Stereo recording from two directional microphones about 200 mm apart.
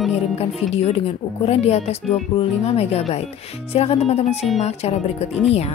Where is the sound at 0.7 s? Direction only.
30° left (ahead or behind).